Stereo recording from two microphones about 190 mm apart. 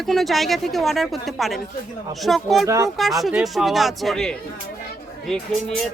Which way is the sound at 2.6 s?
15° right (ahead or behind).